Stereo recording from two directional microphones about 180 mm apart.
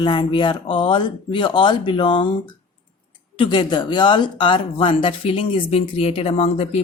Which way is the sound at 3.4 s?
25° left (ahead or behind).